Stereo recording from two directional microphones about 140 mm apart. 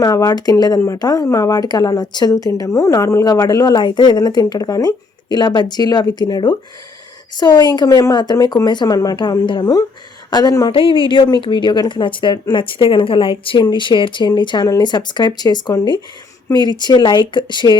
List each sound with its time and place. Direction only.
0.0 s speech: 25° left (ahead or behind)
10.7 s speech: 40° left (ahead or behind)